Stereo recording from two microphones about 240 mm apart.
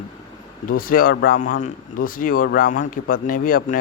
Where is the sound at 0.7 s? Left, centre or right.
Left.